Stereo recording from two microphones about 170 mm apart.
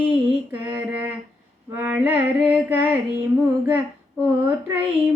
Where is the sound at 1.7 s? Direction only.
10° right (ahead or behind).